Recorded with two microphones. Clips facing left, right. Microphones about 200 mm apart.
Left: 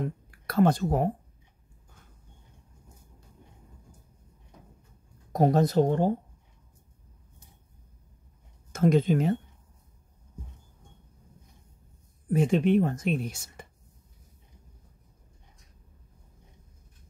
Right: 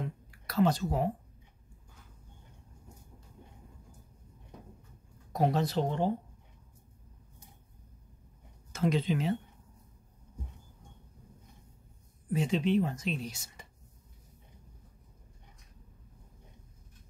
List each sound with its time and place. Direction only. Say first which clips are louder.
0.0 s speech: left 6 dB; 55° left (ahead or behind)
5.3 s speech: left 6 dB; 45° left (ahead or behind)
8.7 s speech: left 7 dB; 50° left (ahead or behind)
12.3 s speech: left 6 dB; 55° left (ahead or behind)